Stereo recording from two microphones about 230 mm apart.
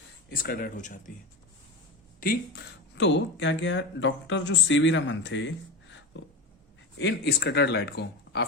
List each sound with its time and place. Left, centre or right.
0.3 s speech: left
2.2 s speech: left
2.9 s speech: left
7.0 s speech: left